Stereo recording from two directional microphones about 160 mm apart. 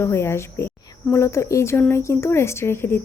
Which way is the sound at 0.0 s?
15° left (ahead or behind).